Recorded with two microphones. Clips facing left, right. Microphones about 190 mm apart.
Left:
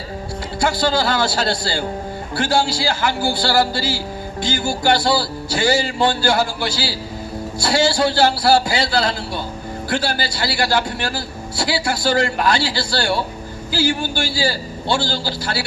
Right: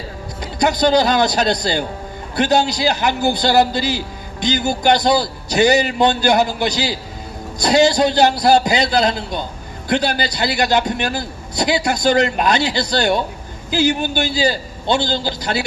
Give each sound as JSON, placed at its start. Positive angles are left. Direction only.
{"t": 0.6, "sound": "a man's voice", "side_deg": -20}